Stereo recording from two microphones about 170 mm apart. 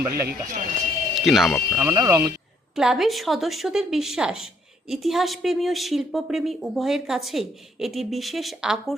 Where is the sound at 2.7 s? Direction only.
5° right (ahead or behind).